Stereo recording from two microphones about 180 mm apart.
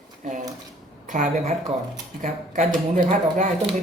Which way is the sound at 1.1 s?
45° right (ahead or behind).